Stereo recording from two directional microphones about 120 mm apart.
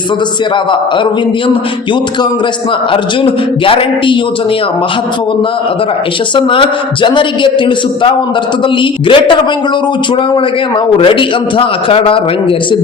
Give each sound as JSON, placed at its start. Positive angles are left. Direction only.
{"t": 2.9, "sound": "a man's voice", "side_deg": 50}
{"t": 6.3, "sound": "a man's voice", "side_deg": 45}
{"t": 8.8, "sound": "a man's voice", "side_deg": 45}
{"t": 11.0, "sound": "a man's voice", "side_deg": 45}